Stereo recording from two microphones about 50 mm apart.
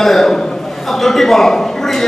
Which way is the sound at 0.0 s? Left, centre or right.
Centre.